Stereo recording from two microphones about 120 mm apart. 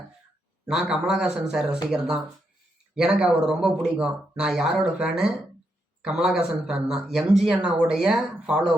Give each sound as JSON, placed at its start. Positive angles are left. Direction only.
{"t": 0.7, "sound": "a man's voice", "side_deg": -5}